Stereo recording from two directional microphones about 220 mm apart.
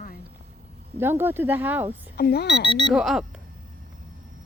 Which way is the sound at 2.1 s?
45° left (ahead or behind).